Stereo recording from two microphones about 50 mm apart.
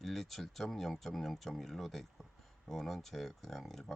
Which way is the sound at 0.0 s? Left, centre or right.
Centre.